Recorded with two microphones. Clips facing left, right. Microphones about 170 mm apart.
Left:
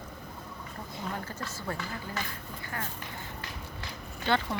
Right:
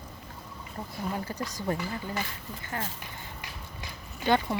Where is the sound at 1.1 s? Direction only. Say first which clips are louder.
Right 4 dB; 15° right (ahead or behind).